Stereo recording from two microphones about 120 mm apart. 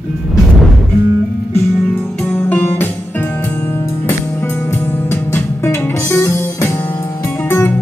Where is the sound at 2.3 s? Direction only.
20° left (ahead or behind).